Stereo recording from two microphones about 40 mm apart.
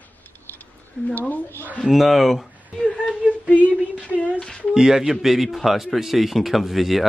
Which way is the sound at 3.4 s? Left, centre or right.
Left.